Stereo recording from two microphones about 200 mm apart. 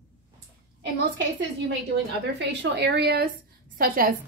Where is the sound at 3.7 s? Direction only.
45° right (ahead or behind).